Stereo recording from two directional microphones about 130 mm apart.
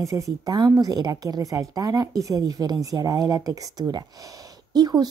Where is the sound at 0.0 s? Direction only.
25° right (ahead or behind).